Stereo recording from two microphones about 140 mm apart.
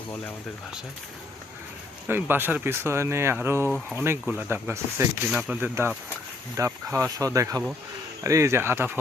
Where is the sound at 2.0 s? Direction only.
15° right (ahead or behind).